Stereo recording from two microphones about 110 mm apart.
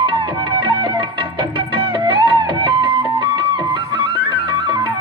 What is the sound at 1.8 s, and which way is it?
Music, 55° right (ahead or behind).